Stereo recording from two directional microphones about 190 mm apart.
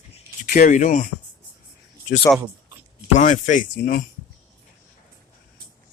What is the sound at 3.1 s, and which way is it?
Speech, 40° left (ahead or behind).